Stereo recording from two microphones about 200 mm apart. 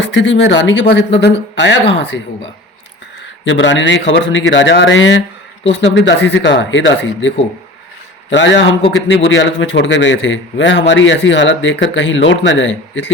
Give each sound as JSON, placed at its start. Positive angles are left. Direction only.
{"t": 0.0, "sound": "speech", "side_deg": 65}
{"t": 3.4, "sound": "a man's voice", "side_deg": 65}